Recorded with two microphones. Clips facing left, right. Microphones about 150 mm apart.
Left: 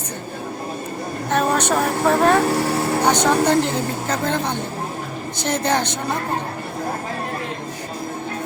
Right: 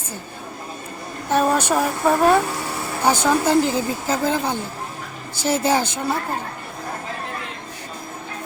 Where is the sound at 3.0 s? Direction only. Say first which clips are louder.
Right 1 dB; 5° right (ahead or behind).